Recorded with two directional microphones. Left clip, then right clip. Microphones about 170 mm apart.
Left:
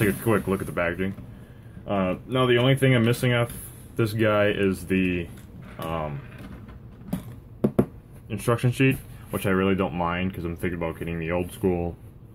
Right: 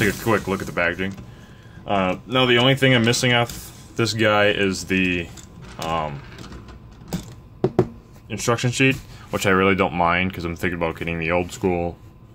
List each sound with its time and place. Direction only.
0.0 s speech: 10° right (ahead or behind)
1.9 s speech: 20° right (ahead or behind)
8.3 s speech: 10° right (ahead or behind)
9.3 s speech: 30° right (ahead or behind)